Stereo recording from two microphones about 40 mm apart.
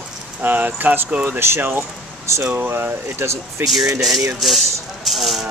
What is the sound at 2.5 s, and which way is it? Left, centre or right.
Speech, right.